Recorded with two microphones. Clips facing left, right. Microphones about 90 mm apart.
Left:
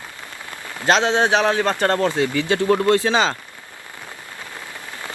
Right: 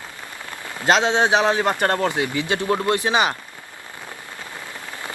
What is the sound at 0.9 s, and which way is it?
Speech, 15° right (ahead or behind).